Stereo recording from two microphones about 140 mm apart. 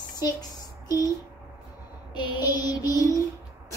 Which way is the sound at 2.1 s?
35° left (ahead or behind).